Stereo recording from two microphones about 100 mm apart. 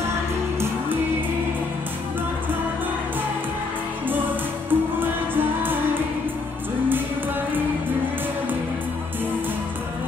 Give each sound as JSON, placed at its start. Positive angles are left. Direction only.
{"t": 4.6, "sound": "music", "side_deg": -20}